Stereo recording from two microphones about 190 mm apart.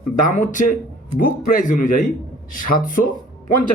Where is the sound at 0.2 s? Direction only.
45° left (ahead or behind).